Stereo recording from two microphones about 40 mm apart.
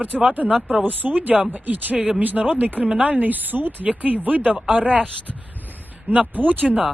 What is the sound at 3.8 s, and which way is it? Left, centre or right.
Speech, right.